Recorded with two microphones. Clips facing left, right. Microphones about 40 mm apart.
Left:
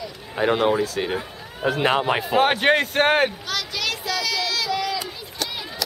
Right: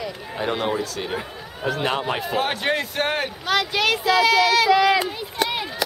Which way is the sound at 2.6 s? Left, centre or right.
Left.